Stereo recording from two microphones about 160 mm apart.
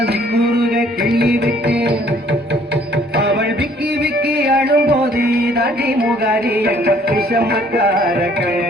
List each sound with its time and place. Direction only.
0.0 s music: 80° right
3.2 s music: 90° right